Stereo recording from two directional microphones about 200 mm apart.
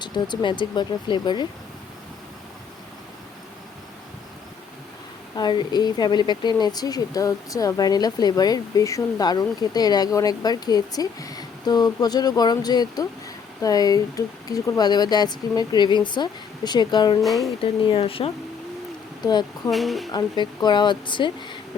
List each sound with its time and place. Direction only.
0.0 s speech: 25° left (ahead or behind)
5.4 s speech: 20° left (ahead or behind)
17.2 s a woman's voice: centre (ahead or behind)
17.6 s speech: 25° left (ahead or behind)
19.7 s a woman's voice: centre (ahead or behind)
20.1 s speech: 20° left (ahead or behind)